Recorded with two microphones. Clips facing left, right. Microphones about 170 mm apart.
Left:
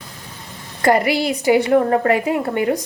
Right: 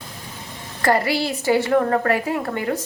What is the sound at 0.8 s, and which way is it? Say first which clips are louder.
A woman's voice: left 4 dB; 15° left (ahead or behind).